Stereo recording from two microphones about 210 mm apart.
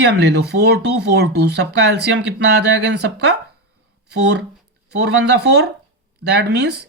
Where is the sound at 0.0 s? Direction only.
55° right (ahead or behind).